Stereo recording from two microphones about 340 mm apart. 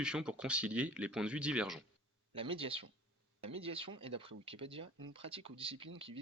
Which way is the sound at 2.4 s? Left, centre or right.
Centre.